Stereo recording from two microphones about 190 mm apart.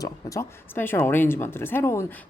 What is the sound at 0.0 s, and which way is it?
Speech, 15° left (ahead or behind).